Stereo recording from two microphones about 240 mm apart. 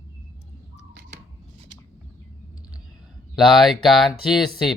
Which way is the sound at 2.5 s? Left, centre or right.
Centre.